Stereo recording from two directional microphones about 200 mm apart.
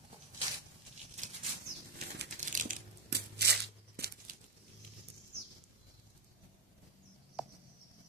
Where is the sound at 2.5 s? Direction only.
40° right (ahead or behind).